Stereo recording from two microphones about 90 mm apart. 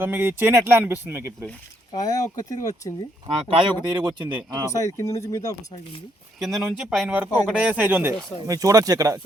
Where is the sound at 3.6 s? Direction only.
55° right (ahead or behind).